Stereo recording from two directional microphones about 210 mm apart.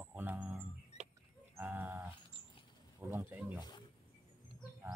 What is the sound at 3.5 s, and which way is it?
Wild animals, 20° left (ahead or behind).